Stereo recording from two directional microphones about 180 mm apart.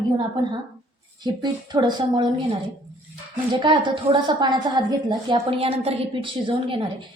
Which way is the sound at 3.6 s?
25° right (ahead or behind).